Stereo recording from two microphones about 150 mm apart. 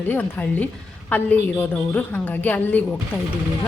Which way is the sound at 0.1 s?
10° left (ahead or behind).